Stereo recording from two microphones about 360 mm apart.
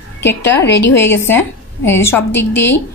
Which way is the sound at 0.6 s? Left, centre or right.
Left.